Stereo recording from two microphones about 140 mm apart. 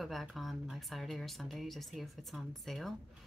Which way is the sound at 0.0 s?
Centre (ahead or behind).